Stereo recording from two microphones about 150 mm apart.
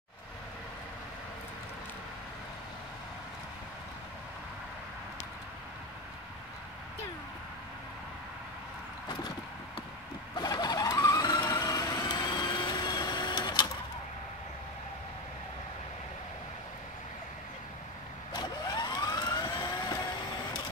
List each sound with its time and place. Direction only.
10.3 s vehicle: 30° left (ahead or behind)
18.3 s vehicle: 30° left (ahead or behind)